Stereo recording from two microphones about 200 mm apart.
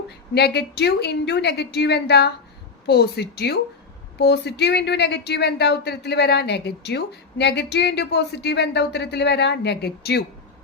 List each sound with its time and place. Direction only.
0.3 s a woman's voice: 55° left (ahead or behind)